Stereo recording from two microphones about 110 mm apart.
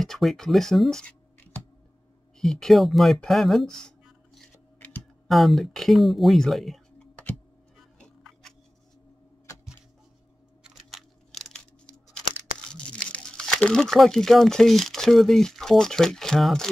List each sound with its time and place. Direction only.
0.0 s speech: centre (ahead or behind)
2.3 s speech: 5° left (ahead or behind)
4.7 s computer keyboard: 15° left (ahead or behind)
5.3 s speech: centre (ahead or behind)
8.0 s music: 5° left (ahead or behind)
10.6 s a sound: centre (ahead or behind)
12.4 s speech: 10° left (ahead or behind)